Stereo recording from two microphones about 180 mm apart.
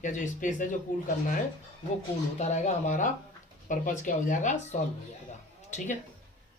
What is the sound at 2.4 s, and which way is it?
A man's voice, 40° left (ahead or behind).